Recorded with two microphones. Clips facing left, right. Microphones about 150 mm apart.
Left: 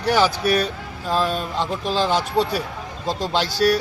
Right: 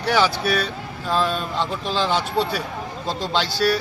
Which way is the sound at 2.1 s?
45° left (ahead or behind).